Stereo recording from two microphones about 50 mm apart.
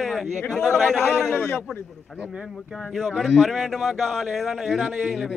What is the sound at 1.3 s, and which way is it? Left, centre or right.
Speech, left.